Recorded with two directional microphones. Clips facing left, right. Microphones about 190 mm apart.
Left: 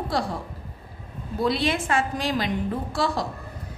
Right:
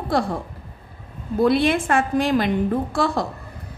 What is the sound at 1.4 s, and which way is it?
A woman's voice, 55° right (ahead or behind).